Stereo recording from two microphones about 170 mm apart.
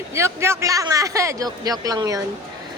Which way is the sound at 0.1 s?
15° right (ahead or behind).